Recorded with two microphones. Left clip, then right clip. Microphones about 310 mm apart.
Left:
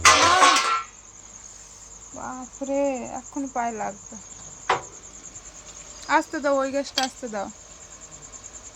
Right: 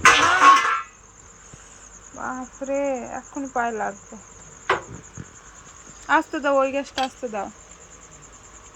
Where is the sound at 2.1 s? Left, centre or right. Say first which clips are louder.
Right 4 dB; centre.